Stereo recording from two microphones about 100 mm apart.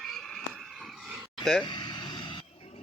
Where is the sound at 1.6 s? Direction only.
50° left (ahead or behind).